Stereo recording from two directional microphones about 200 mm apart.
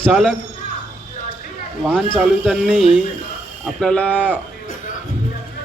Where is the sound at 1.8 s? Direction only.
Centre (ahead or behind).